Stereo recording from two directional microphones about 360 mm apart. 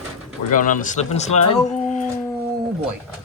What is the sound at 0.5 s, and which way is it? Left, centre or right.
Speech, left.